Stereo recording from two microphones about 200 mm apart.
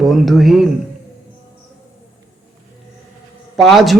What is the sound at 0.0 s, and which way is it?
Speech, centre (ahead or behind).